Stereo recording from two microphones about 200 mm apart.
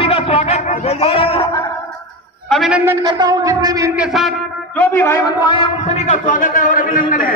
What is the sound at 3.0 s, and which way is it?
Speech, 20° right (ahead or behind).